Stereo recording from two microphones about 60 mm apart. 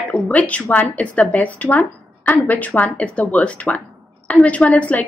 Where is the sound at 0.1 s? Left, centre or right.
Left.